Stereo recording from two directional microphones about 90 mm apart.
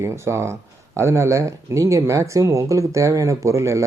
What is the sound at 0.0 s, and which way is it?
Speech, 30° right (ahead or behind).